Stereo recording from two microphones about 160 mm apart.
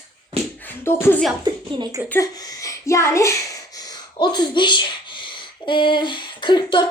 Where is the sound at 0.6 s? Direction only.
15° left (ahead or behind).